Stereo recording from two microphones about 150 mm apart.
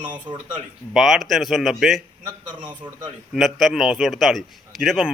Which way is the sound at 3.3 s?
Centre (ahead or behind).